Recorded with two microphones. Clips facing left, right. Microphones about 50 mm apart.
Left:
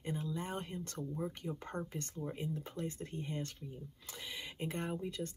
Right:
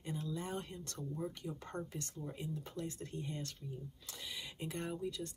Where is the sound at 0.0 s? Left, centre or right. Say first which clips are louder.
Left 2 dB; left.